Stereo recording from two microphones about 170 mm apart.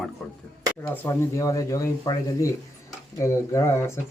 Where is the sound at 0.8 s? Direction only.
15° left (ahead or behind).